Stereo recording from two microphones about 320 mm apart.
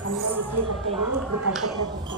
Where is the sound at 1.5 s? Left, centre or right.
Centre.